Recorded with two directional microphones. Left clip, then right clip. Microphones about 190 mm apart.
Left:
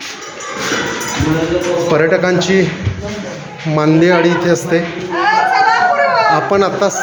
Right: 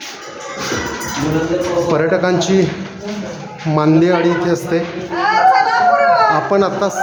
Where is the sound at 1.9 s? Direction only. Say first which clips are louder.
Left 4 dB; 5° right (ahead or behind).